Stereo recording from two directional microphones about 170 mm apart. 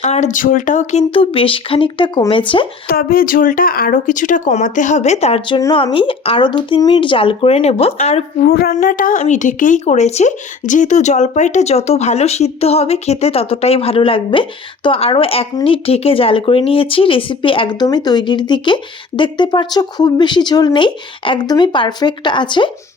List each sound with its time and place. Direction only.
0.0 s speech: 45° left (ahead or behind)
2.8 s speech: 60° left (ahead or behind); by 5.5 s 35° left (ahead or behind)
5.5 s speech: 20° left (ahead or behind)
5.8 s speech: 30° left (ahead or behind)
8.4 s a sound: 65° left (ahead or behind)
8.7 s speech: 50° left (ahead or behind); by 22.7 s 30° left (ahead or behind)